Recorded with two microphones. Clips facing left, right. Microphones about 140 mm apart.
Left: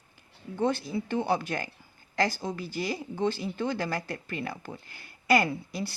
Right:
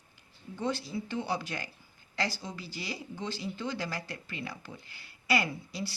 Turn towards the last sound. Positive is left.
turn(degrees=55)  # may be behind; listen again after turning